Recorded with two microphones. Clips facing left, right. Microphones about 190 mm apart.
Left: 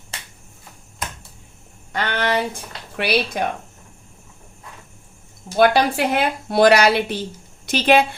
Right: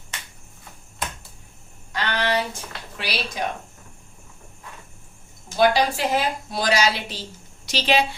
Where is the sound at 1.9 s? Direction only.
55° left (ahead or behind).